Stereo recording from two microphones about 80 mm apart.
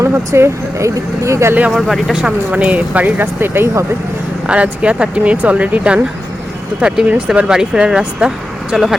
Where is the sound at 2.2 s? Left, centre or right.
Centre.